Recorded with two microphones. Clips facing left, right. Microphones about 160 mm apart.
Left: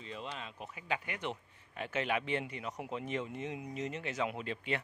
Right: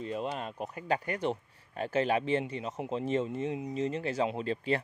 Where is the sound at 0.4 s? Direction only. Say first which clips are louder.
Right 8 dB; 45° right (ahead or behind).